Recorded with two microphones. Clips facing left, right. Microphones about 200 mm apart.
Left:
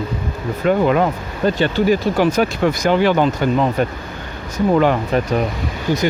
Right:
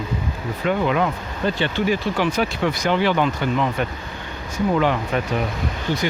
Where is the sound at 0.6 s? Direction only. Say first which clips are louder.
Left 5 dB; 45° left (ahead or behind).